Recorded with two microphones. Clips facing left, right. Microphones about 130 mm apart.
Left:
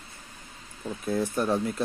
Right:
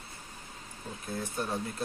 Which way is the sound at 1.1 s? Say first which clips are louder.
Left 8 dB; 70° left (ahead or behind).